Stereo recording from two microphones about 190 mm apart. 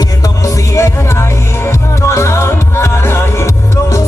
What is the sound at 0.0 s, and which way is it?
Music, 20° left (ahead or behind).